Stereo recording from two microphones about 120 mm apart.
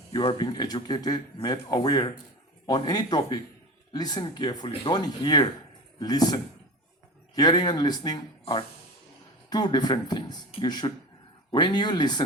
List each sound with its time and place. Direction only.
0.1 s speech: 50° left (ahead or behind)
9.5 s speech: 35° left (ahead or behind)